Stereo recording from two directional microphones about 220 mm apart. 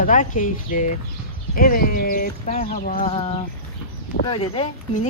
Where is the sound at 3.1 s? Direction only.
25° left (ahead or behind).